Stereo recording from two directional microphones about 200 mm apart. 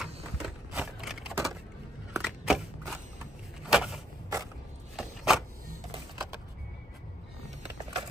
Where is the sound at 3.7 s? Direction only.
Centre (ahead or behind).